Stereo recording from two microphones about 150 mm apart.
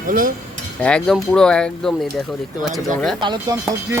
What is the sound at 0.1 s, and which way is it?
Speech, 70° right (ahead or behind).